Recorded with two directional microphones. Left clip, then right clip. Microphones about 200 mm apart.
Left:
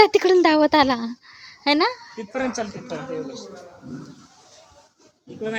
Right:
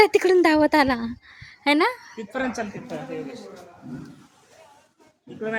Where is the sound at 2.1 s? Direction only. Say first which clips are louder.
Left 1 dB; 25° right (ahead or behind).